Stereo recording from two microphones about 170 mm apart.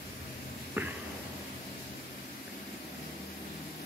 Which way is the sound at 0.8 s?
10° right (ahead or behind).